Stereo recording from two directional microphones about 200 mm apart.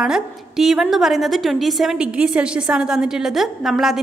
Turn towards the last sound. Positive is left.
turn(degrees=0)  # may be behind; listen again after turning